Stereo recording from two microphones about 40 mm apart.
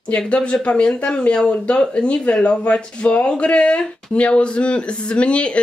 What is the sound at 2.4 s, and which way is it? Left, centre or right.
Speech, left.